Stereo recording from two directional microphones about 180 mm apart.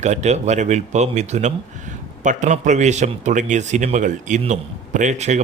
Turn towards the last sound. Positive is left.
turn(degrees=-40)  # may be behind; listen again after turning